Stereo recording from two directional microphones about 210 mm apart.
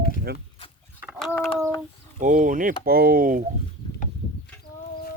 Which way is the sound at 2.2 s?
40° right (ahead or behind).